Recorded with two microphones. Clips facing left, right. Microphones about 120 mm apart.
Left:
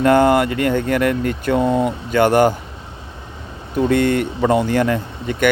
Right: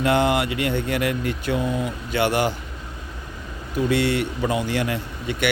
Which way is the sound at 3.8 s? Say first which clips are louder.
Left 5 dB; 50° left (ahead or behind).